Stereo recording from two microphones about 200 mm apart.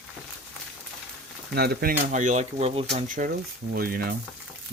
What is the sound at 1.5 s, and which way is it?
Speech, 55° right (ahead or behind).